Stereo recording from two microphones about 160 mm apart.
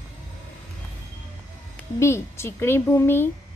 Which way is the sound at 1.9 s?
15° left (ahead or behind).